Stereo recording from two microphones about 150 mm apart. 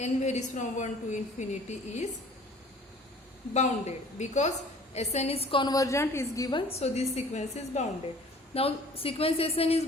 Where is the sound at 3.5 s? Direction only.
50° left (ahead or behind).